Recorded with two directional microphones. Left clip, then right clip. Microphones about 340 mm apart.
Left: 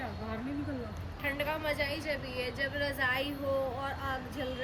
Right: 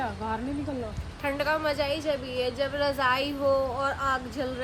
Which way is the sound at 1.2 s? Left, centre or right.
Centre.